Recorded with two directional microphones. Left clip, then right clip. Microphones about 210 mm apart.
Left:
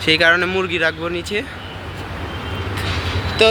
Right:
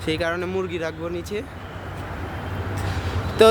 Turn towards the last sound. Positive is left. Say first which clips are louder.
# even
turn(degrees=-50)  # may be behind; listen again after turning